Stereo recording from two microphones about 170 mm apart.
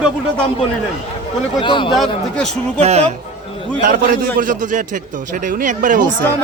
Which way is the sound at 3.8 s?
55° right (ahead or behind).